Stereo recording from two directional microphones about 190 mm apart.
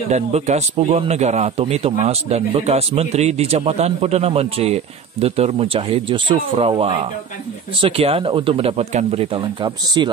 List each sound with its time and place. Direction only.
0.1 s speech: 35° right (ahead or behind)